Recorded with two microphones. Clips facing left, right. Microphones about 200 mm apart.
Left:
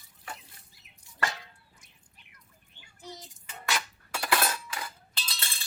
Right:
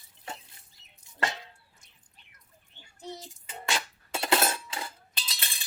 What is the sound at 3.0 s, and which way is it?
Cutlery, 25° right (ahead or behind).